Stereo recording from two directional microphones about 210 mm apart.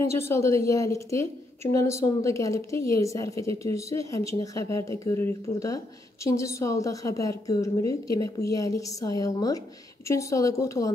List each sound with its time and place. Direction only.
0.0 s a woman's voice: 15° left (ahead or behind)